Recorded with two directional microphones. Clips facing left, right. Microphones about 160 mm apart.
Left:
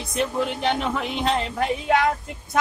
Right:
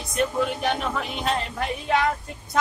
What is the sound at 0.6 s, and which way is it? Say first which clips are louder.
Music: left 2 dB; 20° left (ahead or behind).